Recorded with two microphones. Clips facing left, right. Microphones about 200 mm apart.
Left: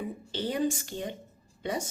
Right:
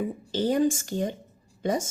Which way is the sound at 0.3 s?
45° right (ahead or behind).